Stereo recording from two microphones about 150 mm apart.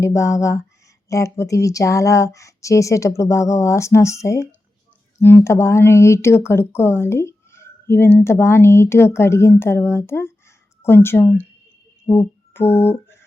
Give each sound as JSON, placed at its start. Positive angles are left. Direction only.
{"t": 0.0, "sound": "speech", "side_deg": 20}
{"t": 12.1, "sound": "mantra", "side_deg": 15}